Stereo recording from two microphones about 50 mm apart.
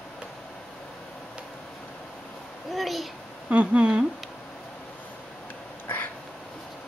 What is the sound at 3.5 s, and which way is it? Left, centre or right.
Speech, right.